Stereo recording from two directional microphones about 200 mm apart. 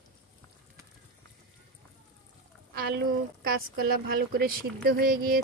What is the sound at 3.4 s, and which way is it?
Speech, 50° right (ahead or behind).